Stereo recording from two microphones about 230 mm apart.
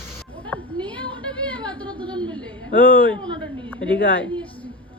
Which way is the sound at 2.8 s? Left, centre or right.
Left.